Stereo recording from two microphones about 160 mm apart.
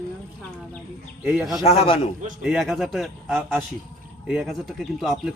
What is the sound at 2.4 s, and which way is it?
A man's voice, 5° right (ahead or behind).